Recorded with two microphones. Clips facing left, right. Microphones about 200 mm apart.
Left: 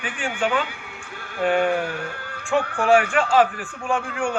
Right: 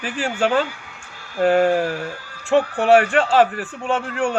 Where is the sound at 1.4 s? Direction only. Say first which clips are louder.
Right 4 dB; 35° right (ahead or behind).